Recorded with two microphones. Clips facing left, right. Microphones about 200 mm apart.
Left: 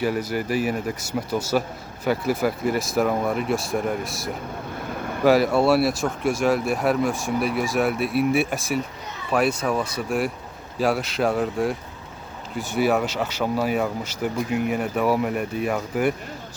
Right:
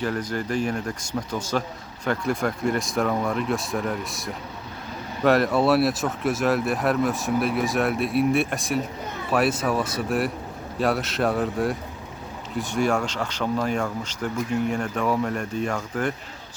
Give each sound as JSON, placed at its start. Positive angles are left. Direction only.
{"t": 0.0, "sound": "speech", "side_deg": 10}
{"t": 4.9, "sound": "vehicle", "side_deg": 55}
{"t": 5.2, "sound": "speech", "side_deg": 0}